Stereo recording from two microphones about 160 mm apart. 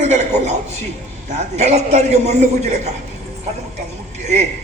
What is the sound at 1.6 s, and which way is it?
A man's voice, 45° right (ahead or behind).